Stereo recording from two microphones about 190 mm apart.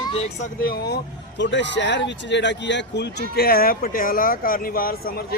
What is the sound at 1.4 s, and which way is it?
Speech, 70° left (ahead or behind).